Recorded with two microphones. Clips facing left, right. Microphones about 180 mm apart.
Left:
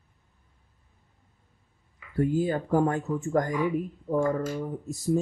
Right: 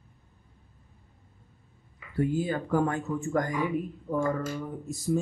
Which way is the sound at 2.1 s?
45° left (ahead or behind).